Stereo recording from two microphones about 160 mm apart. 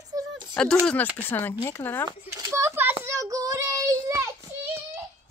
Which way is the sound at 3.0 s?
20° right (ahead or behind).